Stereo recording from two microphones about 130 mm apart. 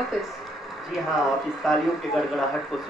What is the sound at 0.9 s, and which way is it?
Speech, 5° right (ahead or behind).